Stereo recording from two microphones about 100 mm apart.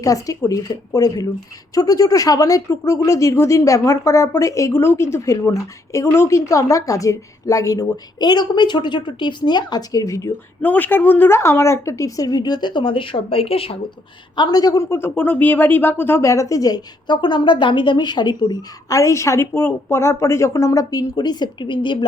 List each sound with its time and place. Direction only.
0.0 s speech: 35° left (ahead or behind)
10.6 s speech: 15° left (ahead or behind); by 13.7 s 70° left (ahead or behind)
14.3 s speech: 45° left (ahead or behind)